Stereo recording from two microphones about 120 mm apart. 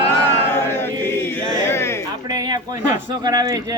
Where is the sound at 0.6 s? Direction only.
20° left (ahead or behind).